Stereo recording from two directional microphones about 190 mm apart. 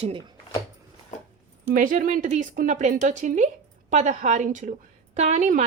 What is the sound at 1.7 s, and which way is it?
A woman's voice, 45° right (ahead or behind).